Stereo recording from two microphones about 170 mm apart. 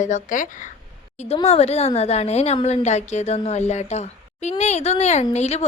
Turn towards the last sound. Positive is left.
turn(degrees=40)  # may be behind; listen again after turning